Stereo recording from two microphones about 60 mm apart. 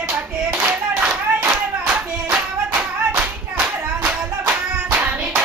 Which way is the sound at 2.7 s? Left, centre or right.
Centre.